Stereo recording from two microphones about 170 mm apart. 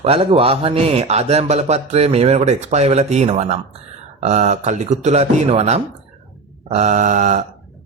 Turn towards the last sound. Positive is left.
turn(degrees=-45)  # may be behind; listen again after turning